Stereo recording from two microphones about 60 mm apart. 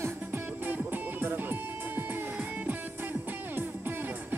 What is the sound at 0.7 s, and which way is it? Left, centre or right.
Music, right.